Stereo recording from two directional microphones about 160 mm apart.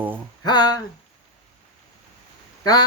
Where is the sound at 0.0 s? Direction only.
10° right (ahead or behind).